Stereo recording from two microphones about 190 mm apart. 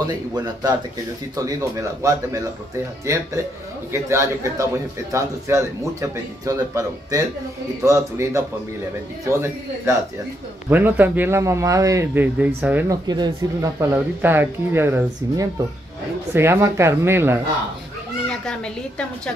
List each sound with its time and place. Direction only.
0.0 s a man's voice: 20° right (ahead or behind)
3.9 s a man's voice: 15° right (ahead or behind)
13.0 s a man's voice: 20° right (ahead or behind)
18.3 s a woman's voice: 5° left (ahead or behind)